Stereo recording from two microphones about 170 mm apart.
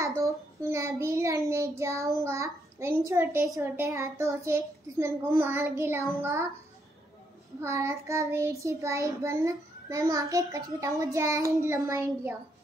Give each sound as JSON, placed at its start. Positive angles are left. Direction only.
{"t": 0.0, "sound": "a child's voice", "side_deg": -15}
{"t": 2.2, "sound": "child singing", "side_deg": -15}
{"t": 7.6, "sound": "child singing", "side_deg": -15}